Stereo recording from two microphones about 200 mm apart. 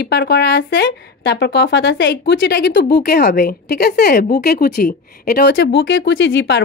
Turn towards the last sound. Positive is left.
turn(degrees=65)  # may be behind; listen again after turning